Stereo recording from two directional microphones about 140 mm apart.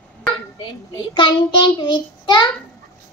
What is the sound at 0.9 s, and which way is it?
A child's voice, 35° left (ahead or behind).